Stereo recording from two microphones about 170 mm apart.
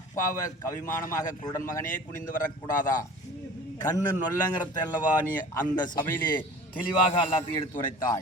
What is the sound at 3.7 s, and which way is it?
A man's voice, 20° left (ahead or behind).